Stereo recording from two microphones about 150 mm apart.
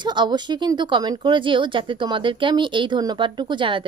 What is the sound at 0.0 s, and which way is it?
Speech, 30° right (ahead or behind).